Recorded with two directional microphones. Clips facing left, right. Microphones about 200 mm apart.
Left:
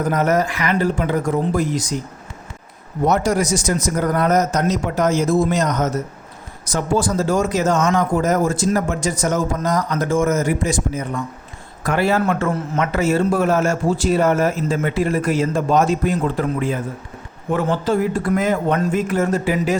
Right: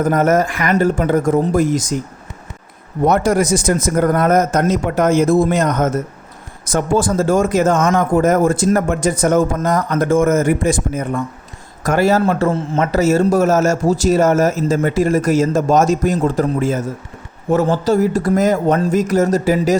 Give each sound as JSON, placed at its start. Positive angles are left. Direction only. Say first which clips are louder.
{"t": 0.0, "sound": "a man's voice", "louder": "right 4 dB", "side_deg": -50}
{"t": 3.1, "sound": "a man's voice", "louder": "right 3 dB", "side_deg": -55}
{"t": 11.8, "sound": "a man's voice", "louder": "right 4 dB", "side_deg": -45}
{"t": 12.2, "sound": "a man's voice", "louder": "right 4 dB", "side_deg": -30}